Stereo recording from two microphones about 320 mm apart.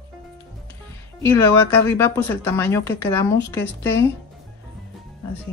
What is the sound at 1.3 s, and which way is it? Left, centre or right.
Speech, centre.